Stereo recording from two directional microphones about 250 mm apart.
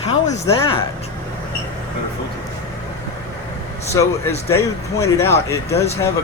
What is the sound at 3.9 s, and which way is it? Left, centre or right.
Speech, centre.